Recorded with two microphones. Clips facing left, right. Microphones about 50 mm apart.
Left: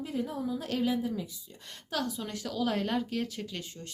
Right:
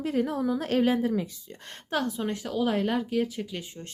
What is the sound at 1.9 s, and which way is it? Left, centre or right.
Speech, right.